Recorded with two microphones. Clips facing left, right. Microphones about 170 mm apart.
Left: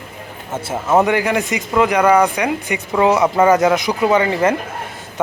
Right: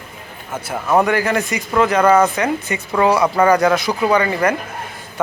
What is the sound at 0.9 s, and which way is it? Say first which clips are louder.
A man's voice: left 1 dB; 20° left (ahead or behind).